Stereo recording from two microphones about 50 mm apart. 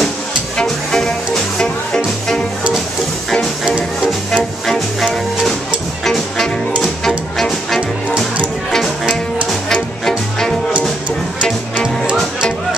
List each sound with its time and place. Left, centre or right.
0.6 s music: centre
3.3 s music: centre
6.0 s music: centre
9.7 s music: centre
11.7 s music: centre